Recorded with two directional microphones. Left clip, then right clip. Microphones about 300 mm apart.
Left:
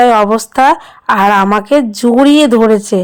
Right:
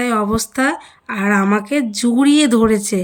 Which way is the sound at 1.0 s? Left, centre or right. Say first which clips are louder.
Left 10 dB; left.